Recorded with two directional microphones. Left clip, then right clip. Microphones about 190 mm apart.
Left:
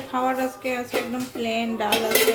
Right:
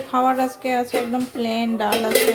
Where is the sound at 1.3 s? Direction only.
30° right (ahead or behind).